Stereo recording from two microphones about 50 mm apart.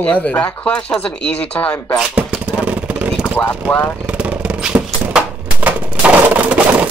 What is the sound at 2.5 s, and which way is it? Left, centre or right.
Vehicle, right.